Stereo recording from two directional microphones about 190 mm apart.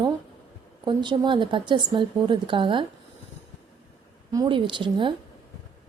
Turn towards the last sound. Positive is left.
turn(degrees=-25)  # may be behind; listen again after turning